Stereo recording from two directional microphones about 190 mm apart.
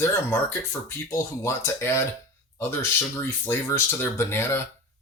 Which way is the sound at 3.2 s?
10° left (ahead or behind).